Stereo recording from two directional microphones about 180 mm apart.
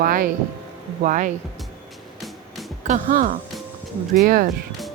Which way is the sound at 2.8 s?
45° right (ahead or behind).